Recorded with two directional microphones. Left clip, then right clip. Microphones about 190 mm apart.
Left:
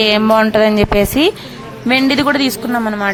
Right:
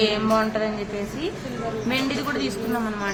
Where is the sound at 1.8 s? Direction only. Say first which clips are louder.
Left 15 dB; 50° left (ahead or behind).